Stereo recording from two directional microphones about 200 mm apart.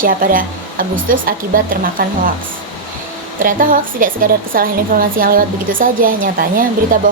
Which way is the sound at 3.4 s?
45° right (ahead or behind).